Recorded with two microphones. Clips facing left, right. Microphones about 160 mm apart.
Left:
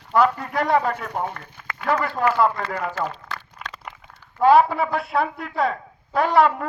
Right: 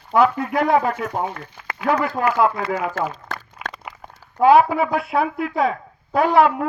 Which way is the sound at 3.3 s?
45° right (ahead or behind).